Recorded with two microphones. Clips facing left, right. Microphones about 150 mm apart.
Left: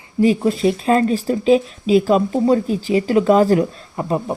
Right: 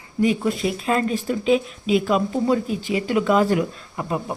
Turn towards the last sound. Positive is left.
turn(degrees=35)  # may be behind; listen again after turning